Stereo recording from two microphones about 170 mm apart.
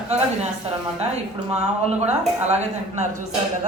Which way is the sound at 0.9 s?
40° right (ahead or behind).